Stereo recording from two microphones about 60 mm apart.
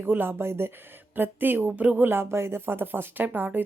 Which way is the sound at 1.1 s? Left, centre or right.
Right.